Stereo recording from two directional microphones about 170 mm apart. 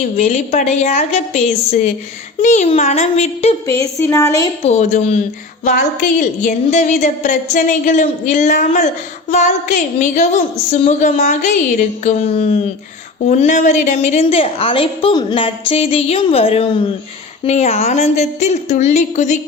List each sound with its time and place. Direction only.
0.2 s a woman's voice: 40° left (ahead or behind)
3.8 s a woman's voice: 15° left (ahead or behind)
4.6 s a woman's voice: 40° left (ahead or behind)